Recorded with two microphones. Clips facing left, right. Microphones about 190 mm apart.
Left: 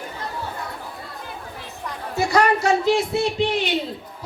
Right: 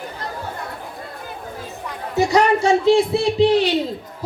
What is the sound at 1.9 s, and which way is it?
Chatter, 15° right (ahead or behind).